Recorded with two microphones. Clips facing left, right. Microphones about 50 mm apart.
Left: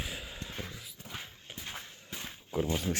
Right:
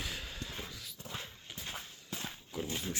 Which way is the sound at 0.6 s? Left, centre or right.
Left.